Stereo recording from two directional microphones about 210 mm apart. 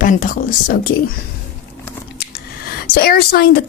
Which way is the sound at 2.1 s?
50° left (ahead or behind).